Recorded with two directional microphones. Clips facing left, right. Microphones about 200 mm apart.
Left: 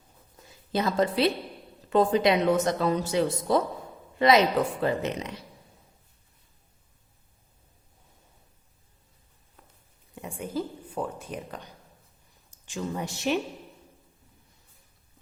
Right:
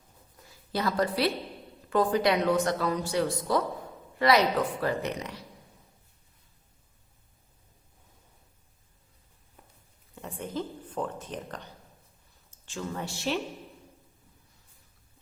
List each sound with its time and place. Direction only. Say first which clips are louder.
0.7 s speech: left 3 dB; 20° left (ahead or behind)
10.2 s speech: left 2 dB; 10° left (ahead or behind)